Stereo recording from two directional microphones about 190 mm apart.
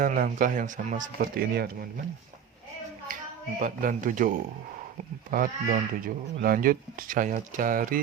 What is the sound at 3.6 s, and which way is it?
Speech, 45° right (ahead or behind).